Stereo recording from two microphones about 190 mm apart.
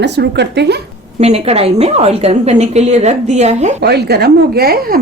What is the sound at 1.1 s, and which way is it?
A woman's voice, 35° right (ahead or behind).